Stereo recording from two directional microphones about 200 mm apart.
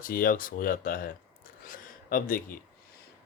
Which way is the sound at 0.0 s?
45° left (ahead or behind).